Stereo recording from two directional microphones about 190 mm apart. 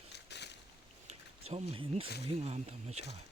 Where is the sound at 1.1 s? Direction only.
30° right (ahead or behind).